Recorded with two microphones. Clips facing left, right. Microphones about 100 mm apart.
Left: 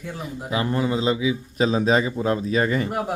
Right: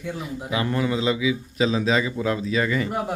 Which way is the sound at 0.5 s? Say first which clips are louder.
Left 1 dB; 30° left (ahead or behind).